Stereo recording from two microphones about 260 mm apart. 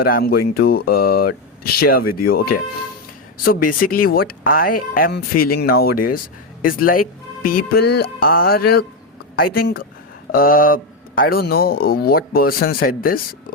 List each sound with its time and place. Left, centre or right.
0.0 s a man's voice: left
5.3 s speech: left
5.5 s a man's voice: left
10.3 s a man's voice: left